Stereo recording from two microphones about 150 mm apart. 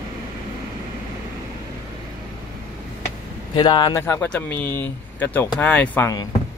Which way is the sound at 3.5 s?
30° left (ahead or behind).